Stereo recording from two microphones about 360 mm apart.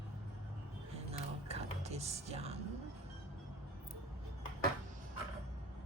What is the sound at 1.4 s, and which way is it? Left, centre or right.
Music, centre.